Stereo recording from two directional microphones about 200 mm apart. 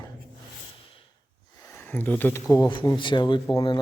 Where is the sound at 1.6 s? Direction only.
10° left (ahead or behind).